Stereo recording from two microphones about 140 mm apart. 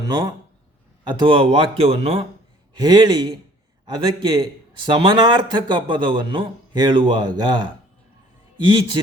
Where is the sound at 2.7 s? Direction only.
30° right (ahead or behind).